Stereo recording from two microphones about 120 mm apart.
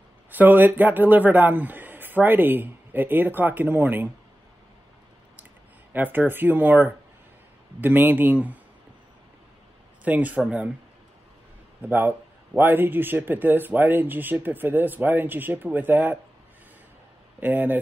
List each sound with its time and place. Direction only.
0.3 s speech: 15° right (ahead or behind)
5.9 s speech: 15° right (ahead or behind)
10.0 s speech: 10° right (ahead or behind)
11.8 s speech: 15° right (ahead or behind)
17.4 s speech: 15° right (ahead or behind)